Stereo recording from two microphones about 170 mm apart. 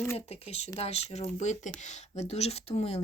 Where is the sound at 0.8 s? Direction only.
35° left (ahead or behind).